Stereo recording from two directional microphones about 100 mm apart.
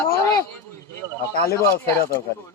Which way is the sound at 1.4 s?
30° left (ahead or behind).